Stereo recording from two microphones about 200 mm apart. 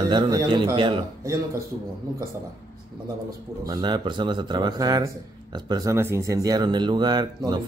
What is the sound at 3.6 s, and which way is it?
Speech, 20° right (ahead or behind).